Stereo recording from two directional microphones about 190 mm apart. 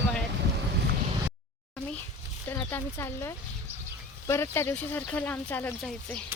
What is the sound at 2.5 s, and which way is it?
Speech, 10° left (ahead or behind).